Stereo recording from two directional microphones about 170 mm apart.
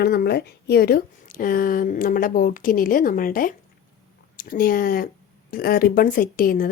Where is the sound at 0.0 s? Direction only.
65° left (ahead or behind).